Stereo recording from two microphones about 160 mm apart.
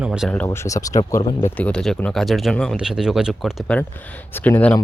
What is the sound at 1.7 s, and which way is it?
Speech, 5° left (ahead or behind).